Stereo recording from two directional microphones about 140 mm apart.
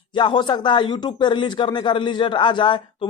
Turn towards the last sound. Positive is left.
turn(degrees=35)  # may be behind; listen again after turning